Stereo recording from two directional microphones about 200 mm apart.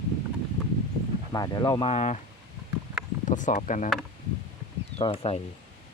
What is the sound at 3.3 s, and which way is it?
Speech, 40° left (ahead or behind).